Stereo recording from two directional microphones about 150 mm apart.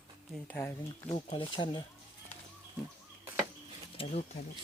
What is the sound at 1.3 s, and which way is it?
Speech, 35° left (ahead or behind).